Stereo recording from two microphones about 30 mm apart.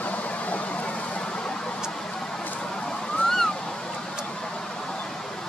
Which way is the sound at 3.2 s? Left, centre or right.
Centre.